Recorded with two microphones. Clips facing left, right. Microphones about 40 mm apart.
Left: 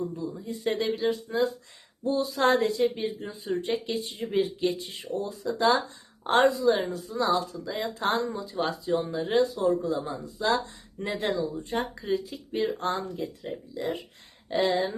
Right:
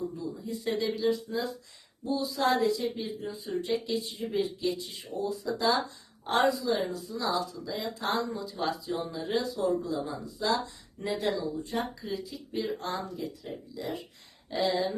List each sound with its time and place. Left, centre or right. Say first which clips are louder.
0.4 s speech: left 3 dB; left